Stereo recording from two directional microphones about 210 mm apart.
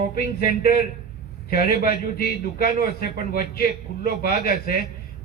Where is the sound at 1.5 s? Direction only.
45° left (ahead or behind).